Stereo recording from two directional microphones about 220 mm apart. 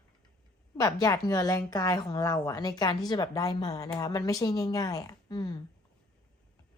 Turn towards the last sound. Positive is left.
turn(degrees=15)  # may be behind; listen again after turning